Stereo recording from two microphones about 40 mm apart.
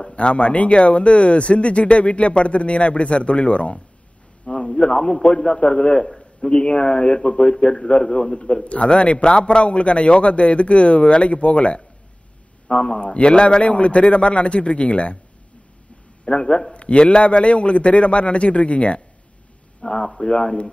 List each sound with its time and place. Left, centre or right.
0.1 s speech: left
16.3 s speech: left